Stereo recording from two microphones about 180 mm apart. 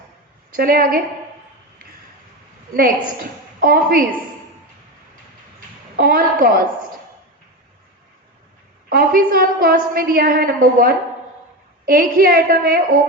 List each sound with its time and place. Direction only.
0.5 s a woman's voice: 55° right (ahead or behind)
2.7 s a woman's voice: 55° right (ahead or behind)
6.0 s a woman's voice: 55° right (ahead or behind)
8.9 s a woman's voice: 55° right (ahead or behind)